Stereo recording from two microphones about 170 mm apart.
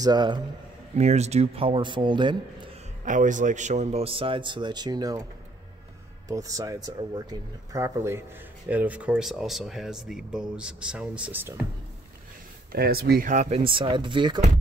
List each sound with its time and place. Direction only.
0.0 s speech: 25° right (ahead or behind)
0.9 s speech: 40° right (ahead or behind)
3.1 s speech: 50° right (ahead or behind); by 5.2 s 25° right (ahead or behind)
6.2 s speech: 20° right (ahead or behind)
12.7 s speech: 65° right (ahead or behind)
13.3 s speech: 40° right (ahead or behind)